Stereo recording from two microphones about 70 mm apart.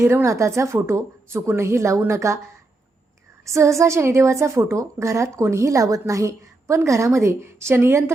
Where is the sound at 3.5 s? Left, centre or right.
Right.